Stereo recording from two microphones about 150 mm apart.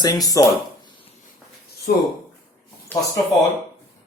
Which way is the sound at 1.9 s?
80° left.